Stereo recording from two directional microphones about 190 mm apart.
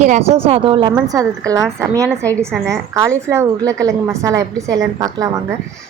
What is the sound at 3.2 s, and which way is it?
Speech, 15° right (ahead or behind).